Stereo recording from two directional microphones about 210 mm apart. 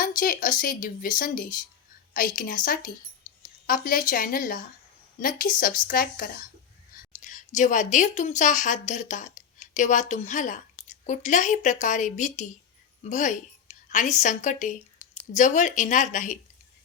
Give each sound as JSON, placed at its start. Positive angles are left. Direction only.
{"t": 0.2, "sound": "a woman's voice", "side_deg": 40}